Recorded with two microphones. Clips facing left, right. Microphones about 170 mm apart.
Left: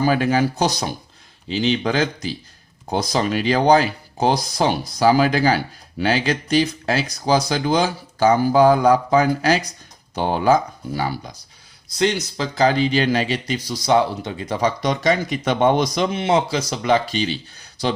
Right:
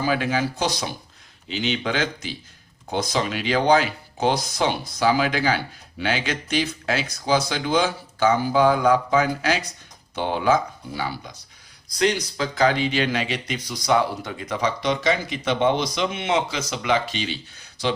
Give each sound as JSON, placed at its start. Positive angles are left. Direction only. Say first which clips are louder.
{"t": 0.0, "sound": "speech", "louder": "left 5 dB", "side_deg": 45}
{"t": 11.9, "sound": "speech", "louder": "left 1 dB", "side_deg": 25}